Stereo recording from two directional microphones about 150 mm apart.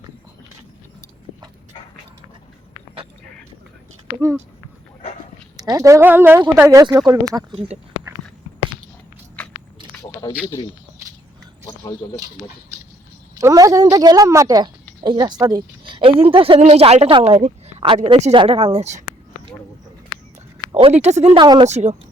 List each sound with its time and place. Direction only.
5.5 s speech: 25° right (ahead or behind)
9.4 s biting: 10° left (ahead or behind)
10.0 s a sound: 25° left (ahead or behind)
12.0 s speech: 20° left (ahead or behind)
13.4 s a woman's voice: 25° right (ahead or behind); by 19.0 s 50° right (ahead or behind)
20.7 s speech: 45° right (ahead or behind)
21.3 s speech: 25° right (ahead or behind)
21.7 s speech: 50° right (ahead or behind)